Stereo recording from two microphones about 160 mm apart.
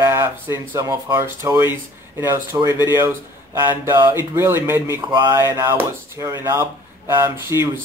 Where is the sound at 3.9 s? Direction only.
15° right (ahead or behind).